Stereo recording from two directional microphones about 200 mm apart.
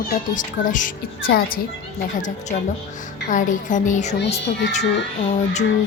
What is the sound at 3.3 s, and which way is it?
Speech, 40° left (ahead or behind).